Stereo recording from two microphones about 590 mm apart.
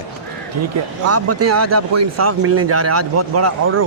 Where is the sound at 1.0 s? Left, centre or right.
Right.